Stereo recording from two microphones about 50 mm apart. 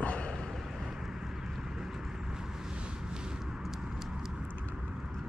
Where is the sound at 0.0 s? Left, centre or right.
Left.